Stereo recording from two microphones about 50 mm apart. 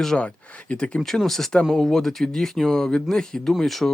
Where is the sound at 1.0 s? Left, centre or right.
Centre.